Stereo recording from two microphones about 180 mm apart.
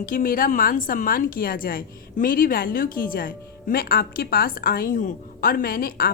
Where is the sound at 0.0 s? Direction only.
50° left (ahead or behind).